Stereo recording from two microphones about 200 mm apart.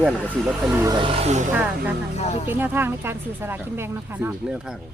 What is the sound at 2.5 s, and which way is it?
Speech, 10° right (ahead or behind).